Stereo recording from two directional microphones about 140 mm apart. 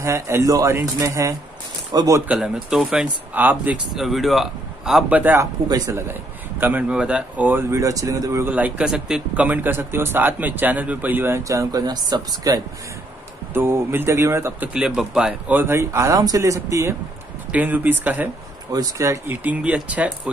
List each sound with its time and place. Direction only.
0.0 s speech: 20° right (ahead or behind)
2.2 s speech: 5° right (ahead or behind); by 12.6 s 25° right (ahead or behind)
13.5 s speech: 15° right (ahead or behind)
14.7 s speech: 5° right (ahead or behind); by 16.9 s 20° right (ahead or behind)
17.5 s speech: 10° right (ahead or behind)
18.7 s speech: 25° right (ahead or behind)